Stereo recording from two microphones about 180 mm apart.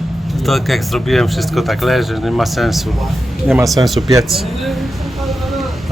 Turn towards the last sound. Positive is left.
turn(degrees=0)  # may be behind; listen again after turning